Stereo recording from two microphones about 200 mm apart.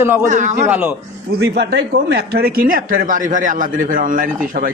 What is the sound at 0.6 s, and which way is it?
Speech, 10° right (ahead or behind).